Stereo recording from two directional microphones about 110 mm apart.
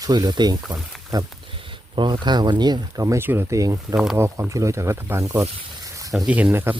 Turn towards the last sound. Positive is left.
turn(degrees=-20)  # may be behind; listen again after turning